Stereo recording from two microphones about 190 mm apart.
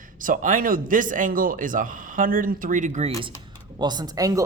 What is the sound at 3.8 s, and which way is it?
Speech, 20° right (ahead or behind).